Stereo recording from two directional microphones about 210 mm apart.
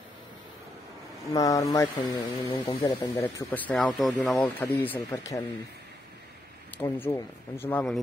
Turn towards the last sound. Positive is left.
turn(degrees=5)  # may be behind; listen again after turning